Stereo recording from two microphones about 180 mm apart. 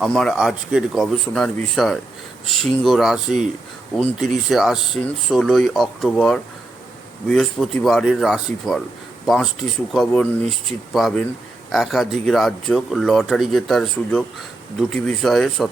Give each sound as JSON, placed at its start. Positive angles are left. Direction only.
{"t": 0.0, "sound": "speech", "side_deg": 0}